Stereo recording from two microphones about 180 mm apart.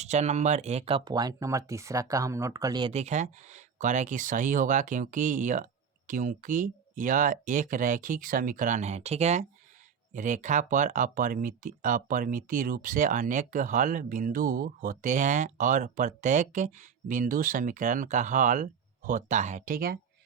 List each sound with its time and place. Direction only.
0.0 s speech: 40° right (ahead or behind); by 2.9 s 20° right (ahead or behind)
2.9 s speech: 40° right (ahead or behind)